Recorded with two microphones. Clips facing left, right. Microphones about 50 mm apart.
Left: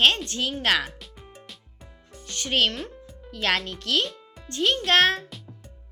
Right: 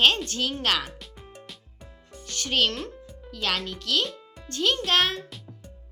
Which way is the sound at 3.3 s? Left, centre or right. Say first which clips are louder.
Left 3 dB; left.